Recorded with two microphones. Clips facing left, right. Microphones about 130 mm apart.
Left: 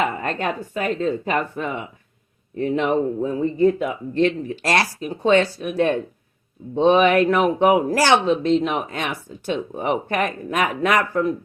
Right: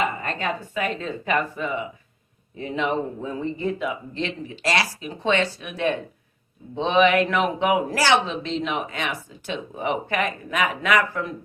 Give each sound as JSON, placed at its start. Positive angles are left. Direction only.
{"t": 0.2, "sound": "speech", "side_deg": 55}
{"t": 1.5, "sound": "speech", "side_deg": 55}